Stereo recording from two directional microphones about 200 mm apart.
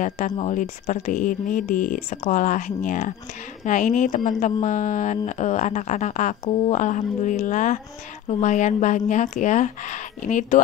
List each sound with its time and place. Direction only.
0.0 s speech: 40° left (ahead or behind)